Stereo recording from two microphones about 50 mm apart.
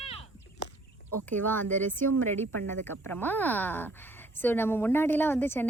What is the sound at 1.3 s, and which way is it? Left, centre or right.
A woman's voice, left.